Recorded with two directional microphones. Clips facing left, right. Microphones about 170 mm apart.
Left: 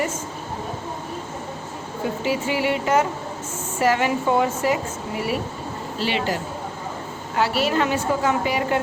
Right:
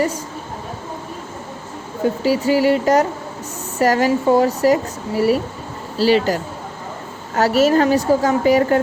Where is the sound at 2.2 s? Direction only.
40° right (ahead or behind).